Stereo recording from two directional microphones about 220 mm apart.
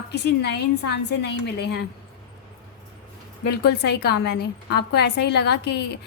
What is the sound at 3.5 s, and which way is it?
A woman's voice, 50° left (ahead or behind).